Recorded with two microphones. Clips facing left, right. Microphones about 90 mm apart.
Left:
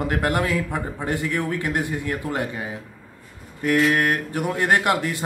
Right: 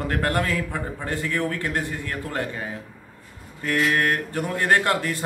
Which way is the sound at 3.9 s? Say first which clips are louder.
Left 1 dB; 15° left (ahead or behind).